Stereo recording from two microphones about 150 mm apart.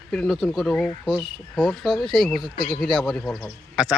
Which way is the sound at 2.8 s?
Centre (ahead or behind).